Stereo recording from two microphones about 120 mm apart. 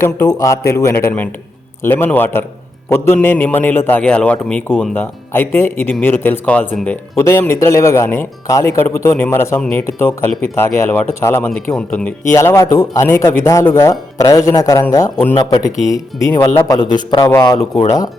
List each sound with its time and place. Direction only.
0.3 s speech: 30° left (ahead or behind)
11.7 s speech: 10° left (ahead or behind)
12.3 s speech: 25° left (ahead or behind)
17.2 s speech: 25° left (ahead or behind)
17.6 s speech: 55° left (ahead or behind)